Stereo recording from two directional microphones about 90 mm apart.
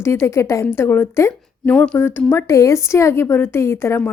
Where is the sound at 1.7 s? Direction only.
10° left (ahead or behind).